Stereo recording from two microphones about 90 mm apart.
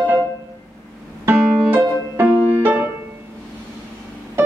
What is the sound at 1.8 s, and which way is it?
Music, 25° right (ahead or behind).